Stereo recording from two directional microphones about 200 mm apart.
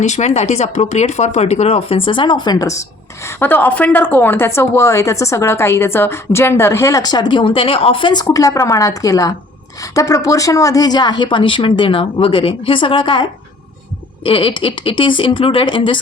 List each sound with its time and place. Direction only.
0.0 s a woman's voice: 35° left (ahead or behind)
14.3 s a woman's voice: 25° left (ahead or behind)